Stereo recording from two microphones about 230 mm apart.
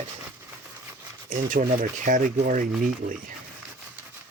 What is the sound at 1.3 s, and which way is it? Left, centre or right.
Speech, right.